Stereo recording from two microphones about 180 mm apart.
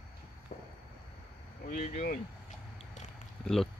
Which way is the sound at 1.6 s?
45° left (ahead or behind).